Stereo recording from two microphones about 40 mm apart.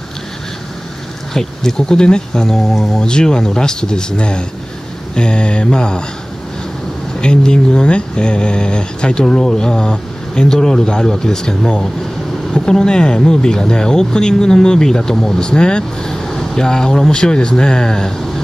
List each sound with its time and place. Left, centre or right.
1.3 s speech: centre
2.4 s speech: centre
3.0 s speech: centre
7.2 s speech: left
9.2 s speech: centre
15.4 s speech: left